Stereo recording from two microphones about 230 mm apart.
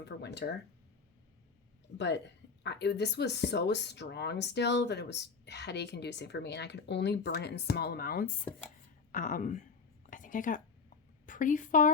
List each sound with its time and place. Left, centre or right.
0.0 s speech: left
2.0 s speech: left
8.4 s speech: centre
9.1 s speech: left
10.1 s a sound: left